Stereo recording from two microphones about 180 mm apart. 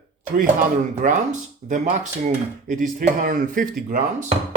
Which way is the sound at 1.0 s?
45° right (ahead or behind).